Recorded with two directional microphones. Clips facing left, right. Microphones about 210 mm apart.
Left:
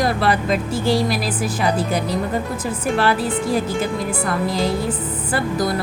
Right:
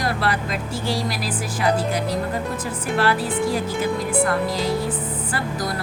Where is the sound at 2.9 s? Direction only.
25° left (ahead or behind).